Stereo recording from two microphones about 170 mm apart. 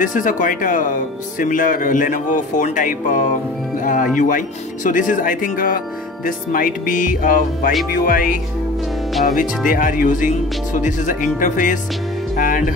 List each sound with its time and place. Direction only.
0.0 s speech: 50° left (ahead or behind)